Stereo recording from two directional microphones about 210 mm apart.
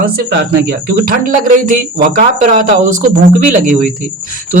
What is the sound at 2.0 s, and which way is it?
Speech, 40° right (ahead or behind).